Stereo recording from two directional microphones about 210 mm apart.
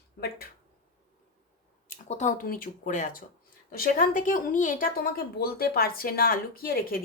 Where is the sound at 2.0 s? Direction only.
35° left (ahead or behind).